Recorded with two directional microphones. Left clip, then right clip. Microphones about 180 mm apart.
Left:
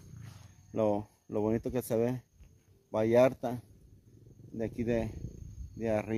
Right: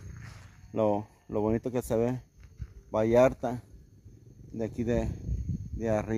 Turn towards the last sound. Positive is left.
turn(degrees=-25)  # may be behind; listen again after turning